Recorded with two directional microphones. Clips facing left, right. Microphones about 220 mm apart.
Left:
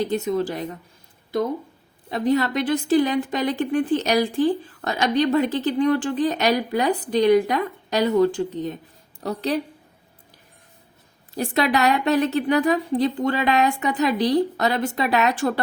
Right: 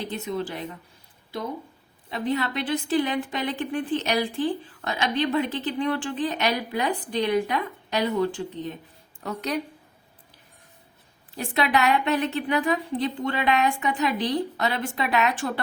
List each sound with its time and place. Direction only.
0.1 s a woman's voice: 45° left (ahead or behind)
2.0 s a woman's voice: 40° left (ahead or behind)
11.3 s a woman's voice: 40° left (ahead or behind)